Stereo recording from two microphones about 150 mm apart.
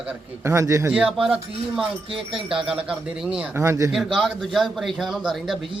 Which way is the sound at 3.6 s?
20° right (ahead or behind).